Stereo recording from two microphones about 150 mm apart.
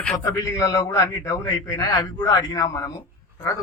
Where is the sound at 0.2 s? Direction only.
20° left (ahead or behind).